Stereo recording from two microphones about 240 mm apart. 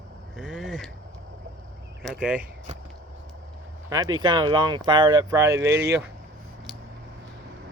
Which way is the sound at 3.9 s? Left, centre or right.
Centre.